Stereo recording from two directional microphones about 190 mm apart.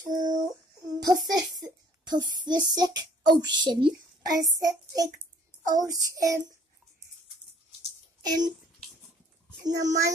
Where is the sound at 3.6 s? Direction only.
20° right (ahead or behind).